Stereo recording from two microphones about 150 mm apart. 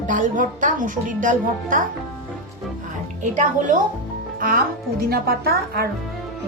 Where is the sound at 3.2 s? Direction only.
55° right (ahead or behind).